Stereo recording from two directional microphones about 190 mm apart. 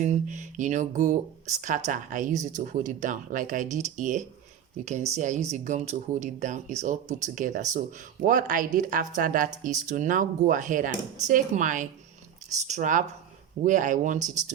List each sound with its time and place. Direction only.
0.0 s speech: 40° right (ahead or behind)